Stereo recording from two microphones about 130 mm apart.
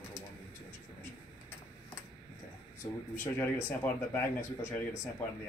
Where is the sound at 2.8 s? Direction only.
20° left (ahead or behind).